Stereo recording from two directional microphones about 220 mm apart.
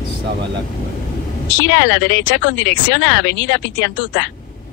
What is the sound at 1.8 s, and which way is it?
Speech, 60° left (ahead or behind).